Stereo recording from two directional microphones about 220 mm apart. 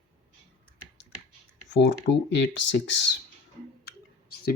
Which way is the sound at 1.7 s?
55° left (ahead or behind).